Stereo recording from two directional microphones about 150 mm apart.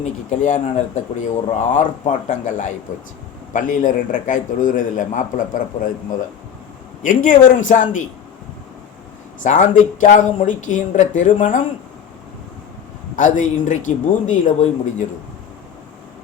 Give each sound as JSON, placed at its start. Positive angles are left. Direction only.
{"t": 0.0, "sound": "speech", "side_deg": 55}
{"t": 9.4, "sound": "speech", "side_deg": 60}
{"t": 13.1, "sound": "speech", "side_deg": 60}